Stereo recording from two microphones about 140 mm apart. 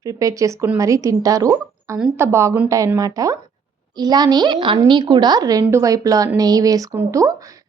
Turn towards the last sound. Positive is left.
turn(degrees=-25)  # may be behind; listen again after turning